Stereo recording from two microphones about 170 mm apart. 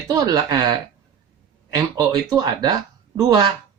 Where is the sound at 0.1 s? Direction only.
20° right (ahead or behind).